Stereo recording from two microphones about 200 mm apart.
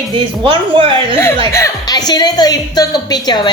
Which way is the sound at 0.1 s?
25° right (ahead or behind).